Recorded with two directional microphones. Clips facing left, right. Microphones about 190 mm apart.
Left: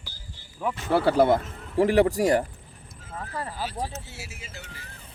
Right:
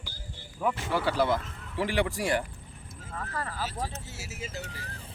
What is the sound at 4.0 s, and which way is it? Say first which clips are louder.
Speech: right 2 dB; 40° right (ahead or behind).